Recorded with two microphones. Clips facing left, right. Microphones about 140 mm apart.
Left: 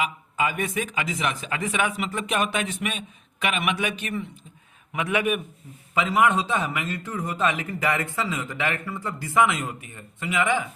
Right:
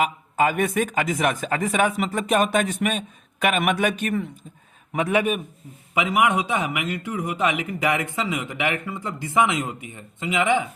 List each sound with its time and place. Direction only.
0.0 s speech: 45° right (ahead or behind)
4.9 s a man's voice: 35° right (ahead or behind)
5.9 s a man's voice: 15° right (ahead or behind)